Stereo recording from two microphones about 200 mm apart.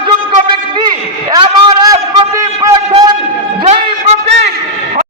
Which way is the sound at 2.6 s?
20° right (ahead or behind).